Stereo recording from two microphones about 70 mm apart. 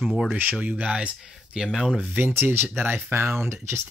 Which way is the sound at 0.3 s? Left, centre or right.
Right.